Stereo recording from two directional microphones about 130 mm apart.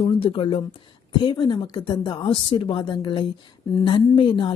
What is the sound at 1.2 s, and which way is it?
A woman's voice, 35° left (ahead or behind).